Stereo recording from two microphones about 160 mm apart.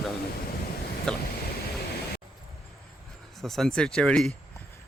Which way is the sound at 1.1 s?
5° left (ahead or behind).